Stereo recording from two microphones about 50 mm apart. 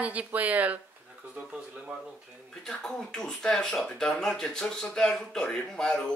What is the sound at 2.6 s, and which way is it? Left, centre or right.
Speech, centre.